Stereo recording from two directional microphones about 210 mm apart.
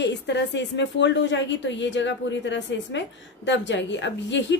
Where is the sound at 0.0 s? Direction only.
55° left (ahead or behind).